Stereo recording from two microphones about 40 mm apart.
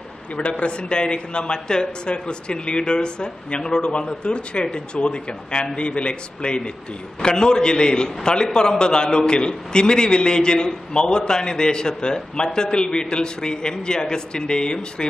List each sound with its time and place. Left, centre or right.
0.4 s a man's voice: left